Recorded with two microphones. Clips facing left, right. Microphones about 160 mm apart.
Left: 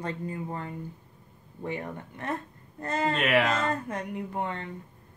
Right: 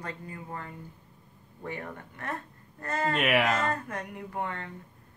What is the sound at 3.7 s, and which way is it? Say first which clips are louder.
Speech: left 2 dB; 20° left (ahead or behind).